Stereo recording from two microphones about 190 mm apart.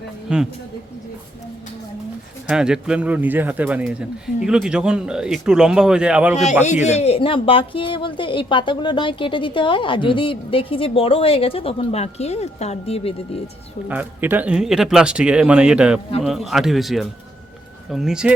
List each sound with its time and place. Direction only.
0.3 s a man's voice: 5° right (ahead or behind)
2.5 s speech: 5° right (ahead or behind)
6.3 s speech: 40° left (ahead or behind)
13.8 s speech: 10° right (ahead or behind)